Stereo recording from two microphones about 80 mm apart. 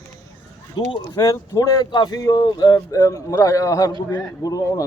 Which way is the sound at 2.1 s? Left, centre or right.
Left.